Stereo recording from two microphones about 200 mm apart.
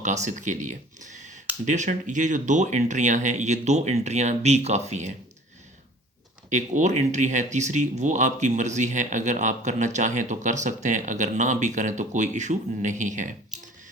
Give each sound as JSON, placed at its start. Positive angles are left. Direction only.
{"t": 0.0, "sound": "speech", "side_deg": -35}
{"t": 6.5, "sound": "speech", "side_deg": -35}